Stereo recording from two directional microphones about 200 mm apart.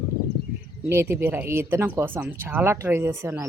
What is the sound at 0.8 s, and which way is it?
Speech, 10° right (ahead or behind).